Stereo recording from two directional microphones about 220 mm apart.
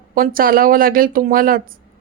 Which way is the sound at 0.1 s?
40° right (ahead or behind).